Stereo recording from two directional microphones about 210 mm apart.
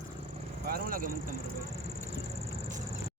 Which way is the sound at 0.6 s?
45° right (ahead or behind).